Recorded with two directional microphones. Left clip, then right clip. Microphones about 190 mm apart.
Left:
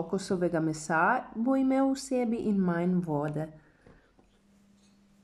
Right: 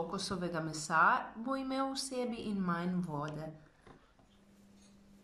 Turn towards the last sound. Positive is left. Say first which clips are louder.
# left 9 dB
turn(degrees=45)  # may be behind; listen again after turning